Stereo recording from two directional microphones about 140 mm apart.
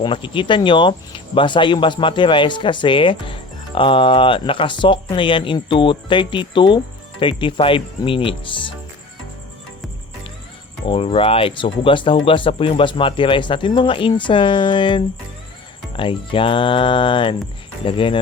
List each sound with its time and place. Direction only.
0.0 s speech: 35° left (ahead or behind)
10.8 s speech: 40° left (ahead or behind)